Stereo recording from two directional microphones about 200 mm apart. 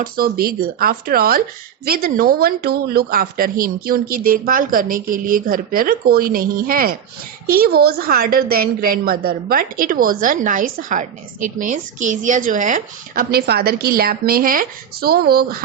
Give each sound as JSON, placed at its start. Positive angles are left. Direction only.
{"t": 0.0, "sound": "a woman's voice", "side_deg": -45}